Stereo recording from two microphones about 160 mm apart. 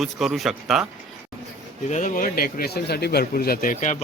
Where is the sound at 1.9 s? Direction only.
55° left (ahead or behind).